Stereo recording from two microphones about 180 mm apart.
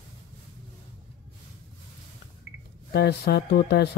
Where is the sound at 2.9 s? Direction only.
60° left (ahead or behind).